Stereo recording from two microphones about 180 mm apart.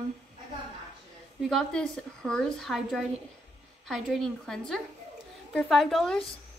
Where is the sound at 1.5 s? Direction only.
5° left (ahead or behind).